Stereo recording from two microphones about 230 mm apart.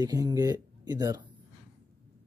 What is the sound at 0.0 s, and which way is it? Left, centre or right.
Speech, centre.